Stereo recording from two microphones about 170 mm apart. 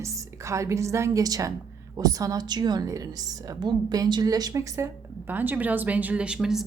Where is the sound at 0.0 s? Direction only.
20° right (ahead or behind).